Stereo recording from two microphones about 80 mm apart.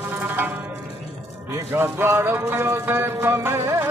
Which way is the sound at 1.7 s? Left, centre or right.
Right.